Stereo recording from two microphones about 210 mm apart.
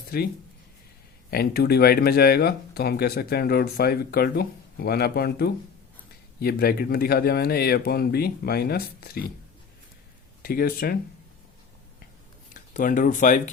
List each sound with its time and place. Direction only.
1.3 s speech: 50° left (ahead or behind)
10.4 s speech: 45° left (ahead or behind)
12.7 s speech: 40° left (ahead or behind)